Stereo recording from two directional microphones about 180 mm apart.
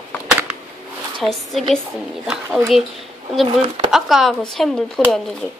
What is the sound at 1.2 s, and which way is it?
Speech, 5° left (ahead or behind).